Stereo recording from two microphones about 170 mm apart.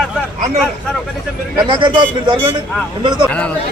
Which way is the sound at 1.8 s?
30° right (ahead or behind).